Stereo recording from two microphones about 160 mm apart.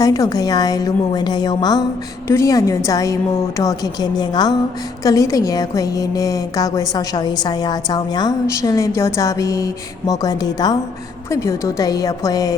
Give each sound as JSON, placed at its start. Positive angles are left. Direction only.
{"t": 0.0, "sound": "a woman's voice", "side_deg": 25}